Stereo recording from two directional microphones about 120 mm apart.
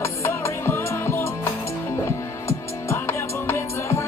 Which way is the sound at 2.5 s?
20° left (ahead or behind).